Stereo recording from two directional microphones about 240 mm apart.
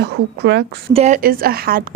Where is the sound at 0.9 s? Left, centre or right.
Right.